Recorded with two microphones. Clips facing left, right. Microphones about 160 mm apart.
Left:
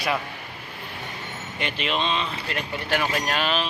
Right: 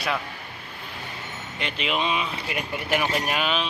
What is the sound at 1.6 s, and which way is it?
Speech, centre (ahead or behind).